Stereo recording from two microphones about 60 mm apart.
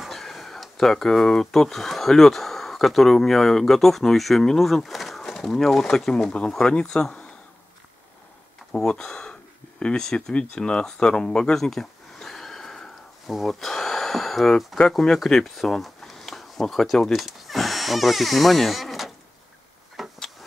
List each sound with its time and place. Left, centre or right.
0.0 s speech: centre
8.7 s speech: centre
20.0 s a sound: centre